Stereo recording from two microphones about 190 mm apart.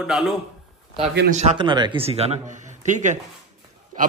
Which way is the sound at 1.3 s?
25° right (ahead or behind).